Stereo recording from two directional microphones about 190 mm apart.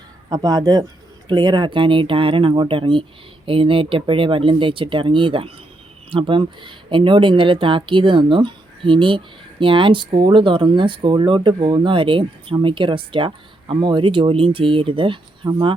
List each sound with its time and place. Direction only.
0.3 s speech: 20° right (ahead or behind)